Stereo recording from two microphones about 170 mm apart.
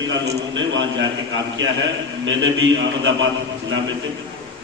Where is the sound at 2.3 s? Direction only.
90° right.